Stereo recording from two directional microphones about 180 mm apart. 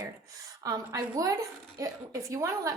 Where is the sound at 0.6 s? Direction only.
20° right (ahead or behind).